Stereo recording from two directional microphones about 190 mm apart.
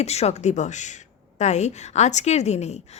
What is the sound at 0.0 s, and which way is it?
Speech, 35° left (ahead or behind).